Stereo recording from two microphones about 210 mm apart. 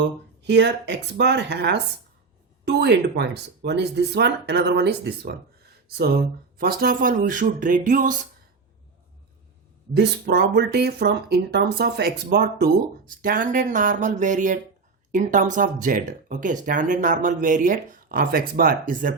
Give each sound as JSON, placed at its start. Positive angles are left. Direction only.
{"t": 0.0, "sound": "speech", "side_deg": -55}
{"t": 9.9, "sound": "speech", "side_deg": -50}